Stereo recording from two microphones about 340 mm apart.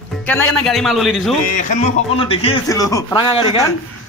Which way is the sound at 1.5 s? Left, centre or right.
Left.